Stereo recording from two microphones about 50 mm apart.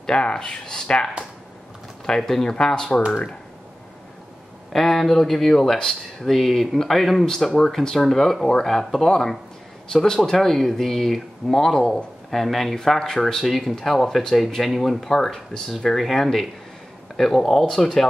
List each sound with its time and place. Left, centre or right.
0.0 s speech: centre
4.7 s speech: centre